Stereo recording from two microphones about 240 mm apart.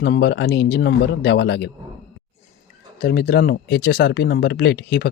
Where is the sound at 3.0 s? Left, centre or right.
Left.